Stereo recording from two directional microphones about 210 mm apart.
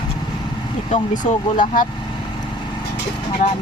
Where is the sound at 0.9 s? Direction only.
40° left (ahead or behind).